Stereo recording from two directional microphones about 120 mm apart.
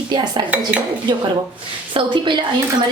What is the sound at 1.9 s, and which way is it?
Speech, 40° right (ahead or behind).